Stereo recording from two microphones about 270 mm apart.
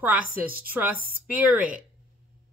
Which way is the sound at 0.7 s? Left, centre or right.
Centre.